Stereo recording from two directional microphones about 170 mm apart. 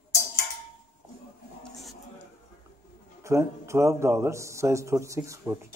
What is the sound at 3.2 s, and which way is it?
A man's voice, 15° right (ahead or behind).